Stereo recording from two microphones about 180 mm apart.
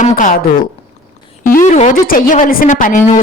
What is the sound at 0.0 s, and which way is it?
Speech, 45° left (ahead or behind).